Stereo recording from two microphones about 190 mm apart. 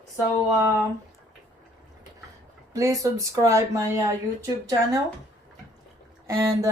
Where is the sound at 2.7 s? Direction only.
15° right (ahead or behind).